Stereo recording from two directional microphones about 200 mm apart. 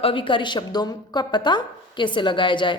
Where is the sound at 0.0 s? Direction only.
25° left (ahead or behind).